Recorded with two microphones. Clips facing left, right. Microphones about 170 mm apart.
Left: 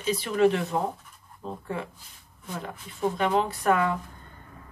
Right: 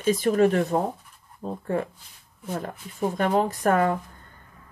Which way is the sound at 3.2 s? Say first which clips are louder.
Right 4 dB; 45° right (ahead or behind).